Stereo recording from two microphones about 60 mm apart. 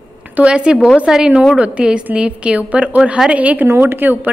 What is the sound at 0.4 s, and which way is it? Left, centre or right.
A woman's voice, centre.